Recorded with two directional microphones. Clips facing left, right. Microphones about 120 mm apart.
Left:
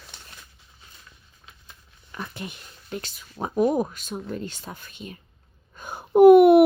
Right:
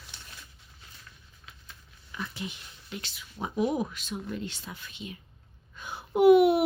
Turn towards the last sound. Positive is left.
turn(degrees=55)  # may be behind; listen again after turning